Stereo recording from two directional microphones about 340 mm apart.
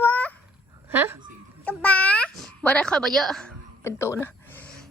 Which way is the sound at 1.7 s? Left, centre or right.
Centre.